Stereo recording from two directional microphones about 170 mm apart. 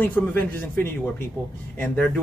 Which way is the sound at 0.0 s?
10° left (ahead or behind).